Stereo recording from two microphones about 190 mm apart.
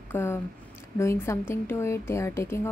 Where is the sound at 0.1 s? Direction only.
10° left (ahead or behind).